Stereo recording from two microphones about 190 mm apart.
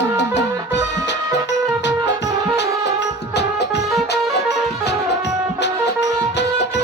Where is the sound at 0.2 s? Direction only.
70° left (ahead or behind).